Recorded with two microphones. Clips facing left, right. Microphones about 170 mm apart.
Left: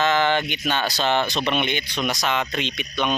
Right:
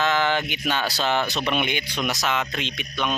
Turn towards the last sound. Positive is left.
turn(degrees=0)  # may be behind; listen again after turning